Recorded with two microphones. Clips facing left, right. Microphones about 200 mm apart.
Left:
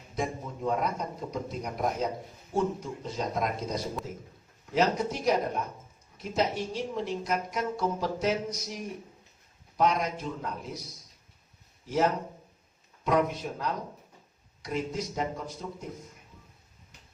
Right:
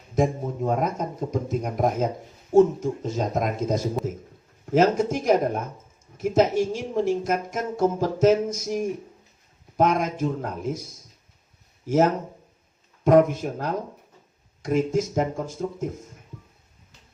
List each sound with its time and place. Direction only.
0.1 s speech: 45° right (ahead or behind)
11.9 s speech: 45° right (ahead or behind)